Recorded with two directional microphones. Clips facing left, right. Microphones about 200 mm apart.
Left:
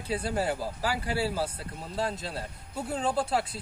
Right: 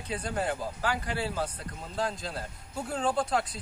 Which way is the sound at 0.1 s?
5° left (ahead or behind).